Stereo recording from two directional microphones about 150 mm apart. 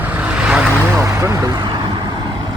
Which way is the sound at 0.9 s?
20° right (ahead or behind).